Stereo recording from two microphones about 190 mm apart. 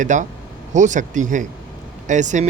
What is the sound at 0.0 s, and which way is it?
A man's voice, 40° right (ahead or behind).